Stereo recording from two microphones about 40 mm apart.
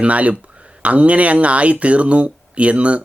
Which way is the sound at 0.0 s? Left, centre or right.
Right.